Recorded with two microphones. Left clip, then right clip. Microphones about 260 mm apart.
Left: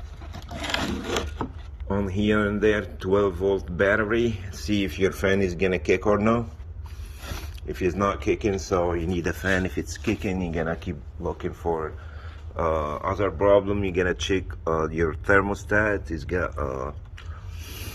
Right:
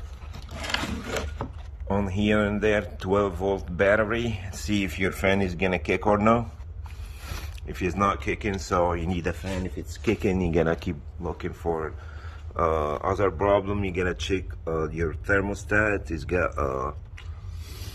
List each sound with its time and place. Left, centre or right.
1.9 s speech: centre
10.0 s speech: centre